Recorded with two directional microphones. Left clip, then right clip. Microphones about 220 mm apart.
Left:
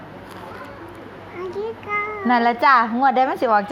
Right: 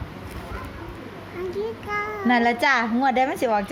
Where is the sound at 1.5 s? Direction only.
15° right (ahead or behind).